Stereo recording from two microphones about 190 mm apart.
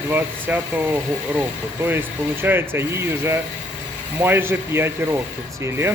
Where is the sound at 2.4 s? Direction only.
10° right (ahead or behind).